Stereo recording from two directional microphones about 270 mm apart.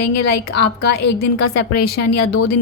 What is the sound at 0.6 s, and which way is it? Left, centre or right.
Speech, left.